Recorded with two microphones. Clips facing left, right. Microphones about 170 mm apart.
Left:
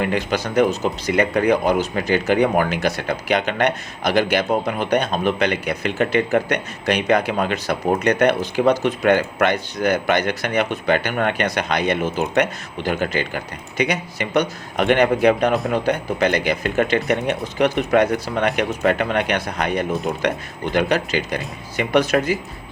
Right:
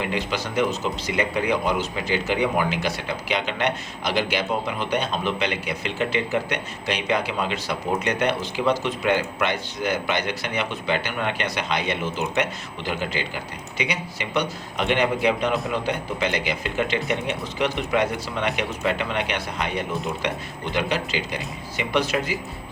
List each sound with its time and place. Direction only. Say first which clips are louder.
0.0 s speech: left 5 dB; 50° left (ahead or behind)